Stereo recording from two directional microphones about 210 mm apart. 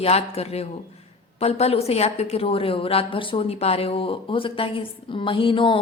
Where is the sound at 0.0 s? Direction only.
30° left (ahead or behind).